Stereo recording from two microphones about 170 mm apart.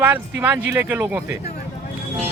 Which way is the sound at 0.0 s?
10° right (ahead or behind).